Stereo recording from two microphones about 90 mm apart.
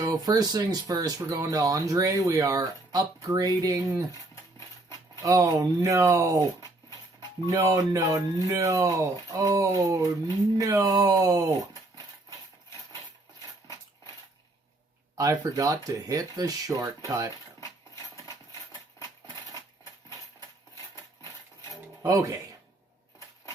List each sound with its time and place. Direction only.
0.0 s speech: 45° right (ahead or behind)
5.2 s speech: 40° right (ahead or behind)
15.2 s speech: 40° right (ahead or behind)
17.6 s a sound: 35° left (ahead or behind)
22.1 s speech: 40° right (ahead or behind)